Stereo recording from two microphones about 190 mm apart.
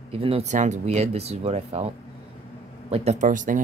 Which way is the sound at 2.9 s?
35° right (ahead or behind).